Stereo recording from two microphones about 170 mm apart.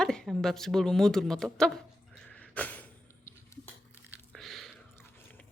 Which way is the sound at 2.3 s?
10° left (ahead or behind).